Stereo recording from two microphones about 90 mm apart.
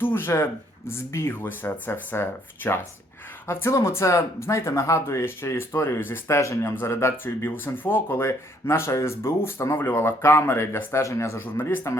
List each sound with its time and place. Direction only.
0.0 s speech: 25° left (ahead or behind)
11.4 s speech: 25° left (ahead or behind)